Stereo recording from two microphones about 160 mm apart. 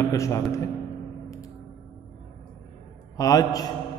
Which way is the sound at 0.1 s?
20° left (ahead or behind).